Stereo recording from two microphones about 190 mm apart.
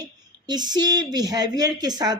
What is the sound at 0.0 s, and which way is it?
Speech, 20° right (ahead or behind).